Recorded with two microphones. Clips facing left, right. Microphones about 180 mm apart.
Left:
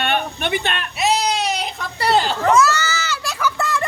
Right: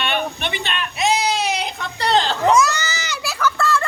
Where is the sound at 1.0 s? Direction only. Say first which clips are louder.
Even; centre (ahead or behind).